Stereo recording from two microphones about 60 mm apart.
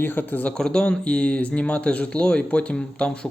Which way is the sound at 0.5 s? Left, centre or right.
Centre.